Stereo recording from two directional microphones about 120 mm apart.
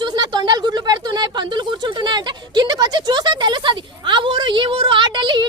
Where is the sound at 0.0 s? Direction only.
40° right (ahead or behind).